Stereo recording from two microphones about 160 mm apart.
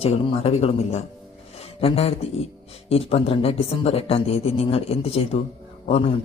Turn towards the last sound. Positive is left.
turn(degrees=40)  # may be behind; listen again after turning